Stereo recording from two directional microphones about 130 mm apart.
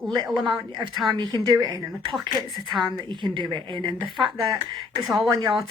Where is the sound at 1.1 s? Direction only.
35° right (ahead or behind).